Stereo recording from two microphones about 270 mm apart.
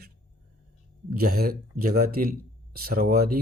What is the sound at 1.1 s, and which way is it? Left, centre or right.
Speech, right.